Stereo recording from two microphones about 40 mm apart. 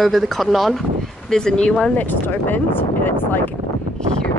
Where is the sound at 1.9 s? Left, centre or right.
Left.